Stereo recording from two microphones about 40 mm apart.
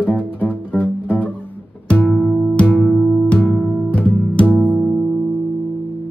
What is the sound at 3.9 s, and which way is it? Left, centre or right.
Music, left.